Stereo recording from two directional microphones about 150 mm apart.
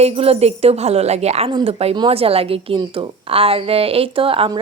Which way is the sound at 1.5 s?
30° right (ahead or behind).